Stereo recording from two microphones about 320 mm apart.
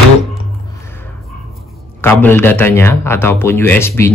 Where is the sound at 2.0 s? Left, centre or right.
Centre.